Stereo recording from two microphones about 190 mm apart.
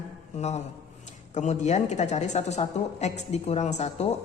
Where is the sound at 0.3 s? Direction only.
35° left (ahead or behind).